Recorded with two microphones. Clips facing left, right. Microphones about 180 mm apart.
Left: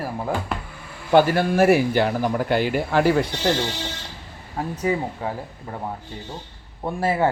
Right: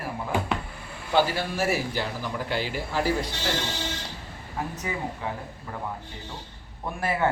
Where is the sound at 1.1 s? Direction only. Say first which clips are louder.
Left 7 dB; 55° left (ahead or behind).